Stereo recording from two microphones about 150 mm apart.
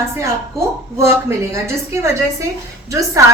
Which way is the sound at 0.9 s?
20° right (ahead or behind).